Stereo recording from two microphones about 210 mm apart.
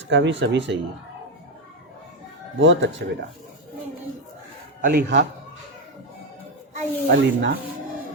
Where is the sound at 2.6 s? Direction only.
65° right (ahead or behind).